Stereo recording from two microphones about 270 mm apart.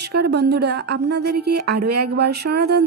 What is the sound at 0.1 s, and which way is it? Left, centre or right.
Music, right.